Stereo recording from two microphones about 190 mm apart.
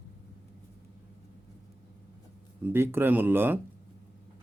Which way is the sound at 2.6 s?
10° right (ahead or behind).